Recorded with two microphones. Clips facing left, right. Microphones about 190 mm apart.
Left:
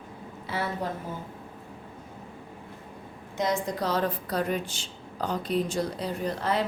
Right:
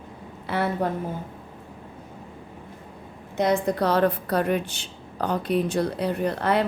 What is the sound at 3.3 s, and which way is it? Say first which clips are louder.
A woman's voice: right 6 dB; 60° right (ahead or behind).